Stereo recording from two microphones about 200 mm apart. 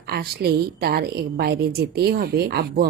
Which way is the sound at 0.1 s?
50° right (ahead or behind).